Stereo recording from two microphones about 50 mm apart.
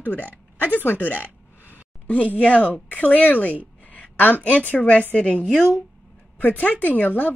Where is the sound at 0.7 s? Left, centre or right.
Left.